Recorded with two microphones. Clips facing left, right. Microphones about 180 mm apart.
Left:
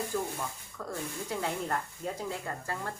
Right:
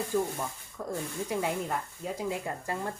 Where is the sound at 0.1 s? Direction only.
15° right (ahead or behind).